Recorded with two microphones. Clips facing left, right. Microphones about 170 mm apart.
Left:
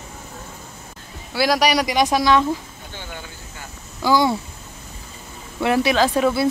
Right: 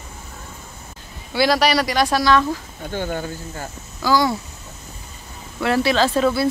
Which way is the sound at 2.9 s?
45° right (ahead or behind).